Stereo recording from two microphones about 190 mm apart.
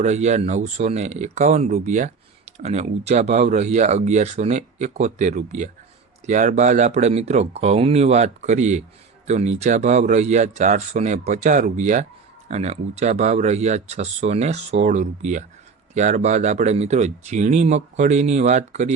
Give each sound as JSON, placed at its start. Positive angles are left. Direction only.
{"t": 0.0, "sound": "speech", "side_deg": -35}